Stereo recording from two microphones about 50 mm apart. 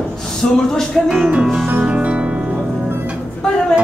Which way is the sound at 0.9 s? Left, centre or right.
Centre.